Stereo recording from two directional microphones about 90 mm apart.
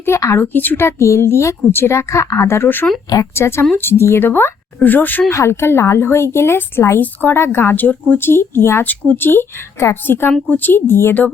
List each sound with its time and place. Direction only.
0.0 s a woman's voice: 30° left (ahead or behind)
0.4 s a woman's voice: 20° left (ahead or behind)
5.3 s a woman's voice: 30° left (ahead or behind)